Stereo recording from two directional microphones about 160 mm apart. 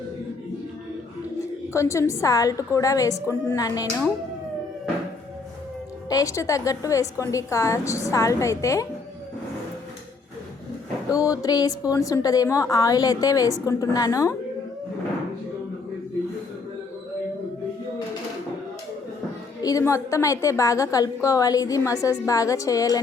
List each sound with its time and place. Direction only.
1.7 s a woman's voice: 20° left (ahead or behind)
6.1 s a woman's voice: 20° left (ahead or behind)
11.1 s a woman's voice: 20° left (ahead or behind)
19.6 s a woman's voice: 20° left (ahead or behind)